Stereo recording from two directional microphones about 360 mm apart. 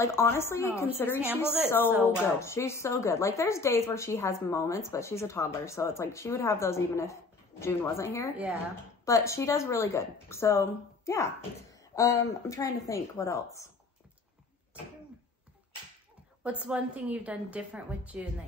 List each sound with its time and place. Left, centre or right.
0.0 s a woman's voice: centre
16.4 s a woman's voice: centre